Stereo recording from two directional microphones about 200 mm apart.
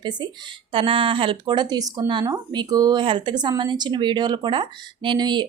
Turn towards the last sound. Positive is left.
turn(degrees=-20)  # may be behind; listen again after turning